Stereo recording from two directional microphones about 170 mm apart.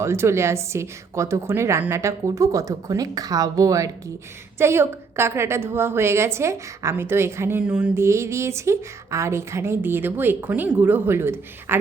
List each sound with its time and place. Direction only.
0.0 s a woman's voice: 15° right (ahead or behind)